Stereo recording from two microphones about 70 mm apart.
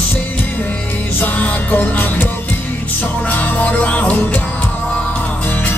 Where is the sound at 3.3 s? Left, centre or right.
Left.